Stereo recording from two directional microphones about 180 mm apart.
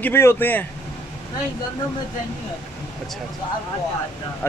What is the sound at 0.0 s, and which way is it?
Speech, 15° left (ahead or behind).